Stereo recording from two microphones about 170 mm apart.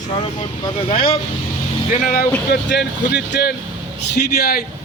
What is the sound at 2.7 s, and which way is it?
A man's voice, 85° left.